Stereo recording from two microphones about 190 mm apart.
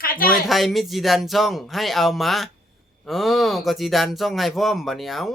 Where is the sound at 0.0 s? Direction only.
50° left (ahead or behind).